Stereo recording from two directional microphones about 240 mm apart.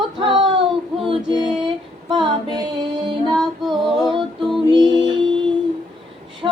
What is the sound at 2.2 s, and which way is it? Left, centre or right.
Music, centre.